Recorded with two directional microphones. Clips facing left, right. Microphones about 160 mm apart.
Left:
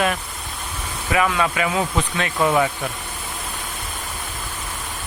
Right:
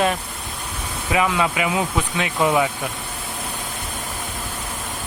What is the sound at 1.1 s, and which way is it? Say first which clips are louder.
Speech: even; 15° right (ahead or behind).